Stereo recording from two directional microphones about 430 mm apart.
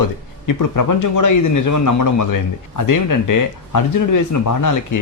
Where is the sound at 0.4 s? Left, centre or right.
Left.